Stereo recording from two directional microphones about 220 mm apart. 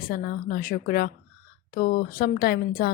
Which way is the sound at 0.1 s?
40° left (ahead or behind).